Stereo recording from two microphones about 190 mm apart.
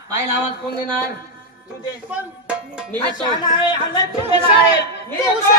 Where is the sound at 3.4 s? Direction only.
25° left (ahead or behind).